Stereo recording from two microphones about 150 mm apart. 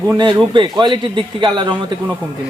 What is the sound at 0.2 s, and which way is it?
A man's voice, 30° right (ahead or behind).